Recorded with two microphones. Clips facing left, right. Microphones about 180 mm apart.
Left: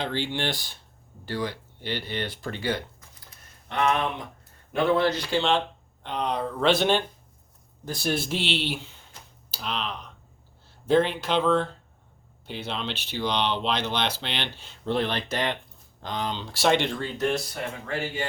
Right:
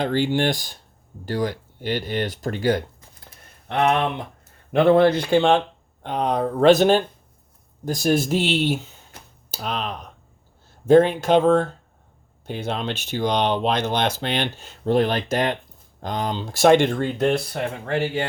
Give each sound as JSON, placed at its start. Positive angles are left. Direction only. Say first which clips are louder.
{"t": 0.0, "sound": "speech", "louder": "right 8 dB", "side_deg": -45}
{"t": 3.2, "sound": "typing", "louder": "right 8 dB", "side_deg": -60}
{"t": 4.7, "sound": "speech", "louder": "right 7 dB", "side_deg": -55}